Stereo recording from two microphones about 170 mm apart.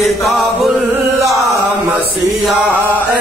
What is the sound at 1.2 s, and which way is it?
Chant, 20° right (ahead or behind).